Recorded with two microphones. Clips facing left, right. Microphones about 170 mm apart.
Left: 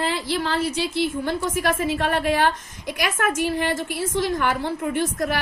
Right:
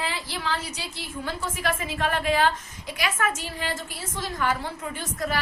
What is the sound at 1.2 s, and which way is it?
A woman's voice, 45° left (ahead or behind).